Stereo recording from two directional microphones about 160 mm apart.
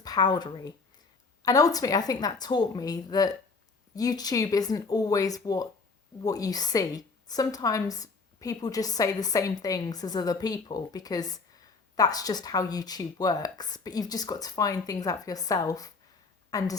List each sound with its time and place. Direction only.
0.0 s a woman's voice: 25° left (ahead or behind)